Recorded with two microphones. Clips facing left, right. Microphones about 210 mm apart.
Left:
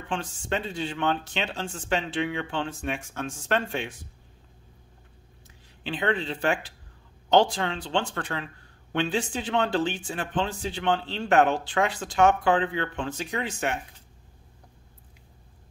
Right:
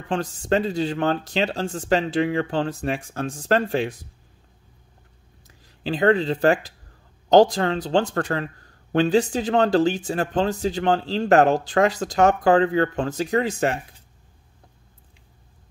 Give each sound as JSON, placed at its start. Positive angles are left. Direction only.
{"t": 0.1, "sound": "speech", "side_deg": -40}
{"t": 5.9, "sound": "speech", "side_deg": -40}